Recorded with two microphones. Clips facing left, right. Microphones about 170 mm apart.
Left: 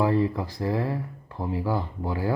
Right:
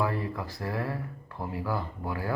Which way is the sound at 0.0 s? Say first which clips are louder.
Left 7 dB; 25° left (ahead or behind).